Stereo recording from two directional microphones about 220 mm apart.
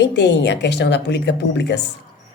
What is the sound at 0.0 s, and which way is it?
A woman's voice, 50° left (ahead or behind).